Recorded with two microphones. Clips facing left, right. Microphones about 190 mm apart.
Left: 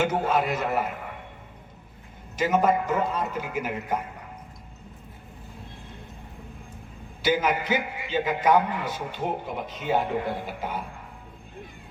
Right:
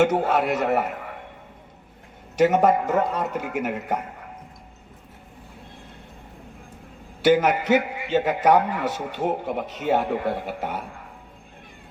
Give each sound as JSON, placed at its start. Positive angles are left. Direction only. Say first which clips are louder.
{"t": 0.0, "sound": "a man's voice", "louder": "right 4 dB", "side_deg": -70}
{"t": 2.3, "sound": "a man's voice", "louder": "right 4 dB", "side_deg": -70}
{"t": 7.2, "sound": "a man's voice", "louder": "right 6 dB", "side_deg": -70}